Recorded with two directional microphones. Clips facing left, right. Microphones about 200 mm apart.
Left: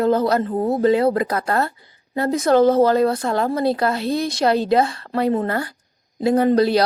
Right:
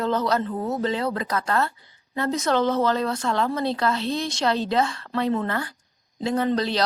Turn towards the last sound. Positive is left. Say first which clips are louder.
# left 7 dB
turn(degrees=40)  # may be behind; listen again after turning